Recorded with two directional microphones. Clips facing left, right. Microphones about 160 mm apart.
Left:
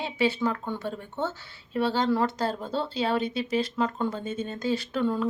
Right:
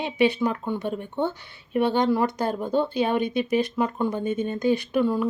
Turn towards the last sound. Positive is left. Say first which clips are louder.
# right 4 dB
turn(degrees=-10)  # may be behind; listen again after turning